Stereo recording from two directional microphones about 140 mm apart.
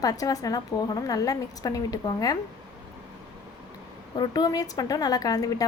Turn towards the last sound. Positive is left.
turn(degrees=25)  # may be behind; listen again after turning